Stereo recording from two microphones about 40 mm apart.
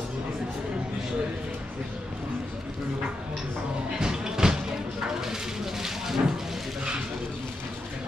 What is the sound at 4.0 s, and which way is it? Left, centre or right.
Music, centre.